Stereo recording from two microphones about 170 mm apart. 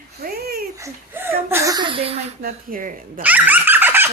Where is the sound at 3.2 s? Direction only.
10° right (ahead or behind).